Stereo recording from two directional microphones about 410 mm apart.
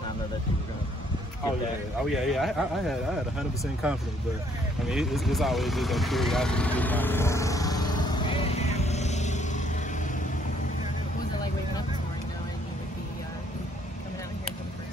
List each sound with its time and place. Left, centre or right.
2.0 s speech: centre
4.8 s vehicle: centre